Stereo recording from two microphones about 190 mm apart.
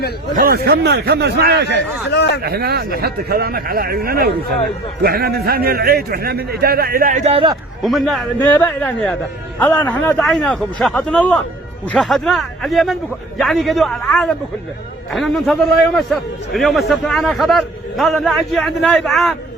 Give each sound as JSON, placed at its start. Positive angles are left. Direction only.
{"t": 0.3, "sound": "speech", "side_deg": -50}
{"t": 2.1, "sound": "speech", "side_deg": 65}
{"t": 2.4, "sound": "a man's voice", "side_deg": -55}
{"t": 7.3, "sound": "a man's voice", "side_deg": -30}
{"t": 7.8, "sound": "a man's voice", "side_deg": 0}
{"t": 16.6, "sound": "a man's voice", "side_deg": 0}